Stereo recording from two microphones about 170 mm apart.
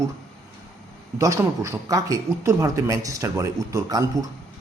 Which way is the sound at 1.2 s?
20° right (ahead or behind).